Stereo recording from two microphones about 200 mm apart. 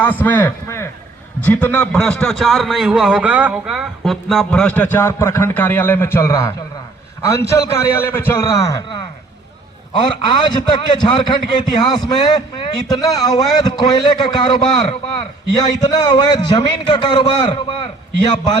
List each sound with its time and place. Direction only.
0.0 s a man's voice: 10° left (ahead or behind)
8.0 s a man's voice: 10° left (ahead or behind)